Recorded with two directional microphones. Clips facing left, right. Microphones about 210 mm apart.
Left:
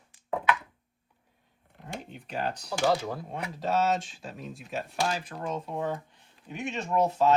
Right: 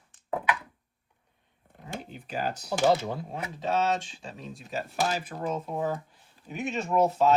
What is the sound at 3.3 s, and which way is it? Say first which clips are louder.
Speech: left 1 dB; centre (ahead or behind).